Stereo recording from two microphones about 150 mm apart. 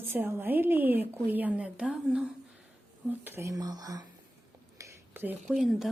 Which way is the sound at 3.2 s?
15° right (ahead or behind).